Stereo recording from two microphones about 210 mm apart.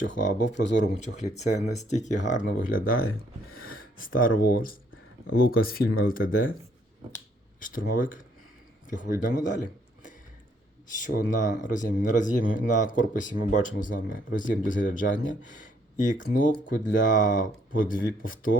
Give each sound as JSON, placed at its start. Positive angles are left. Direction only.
{"t": 0.4, "sound": "speech", "side_deg": 60}
{"t": 0.8, "sound": "speech", "side_deg": 35}
{"t": 3.5, "sound": "a sound", "side_deg": 45}
{"t": 4.4, "sound": "speech", "side_deg": 45}
{"t": 7.6, "sound": "speech", "side_deg": 40}
{"t": 10.9, "sound": "speech", "side_deg": 40}